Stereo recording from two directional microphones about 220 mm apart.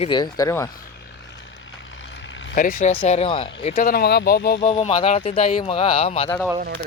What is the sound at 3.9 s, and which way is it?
Speech, 45° left (ahead or behind).